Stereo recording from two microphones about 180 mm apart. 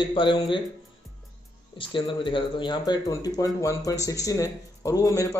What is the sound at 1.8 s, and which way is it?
A man's voice, 30° left (ahead or behind).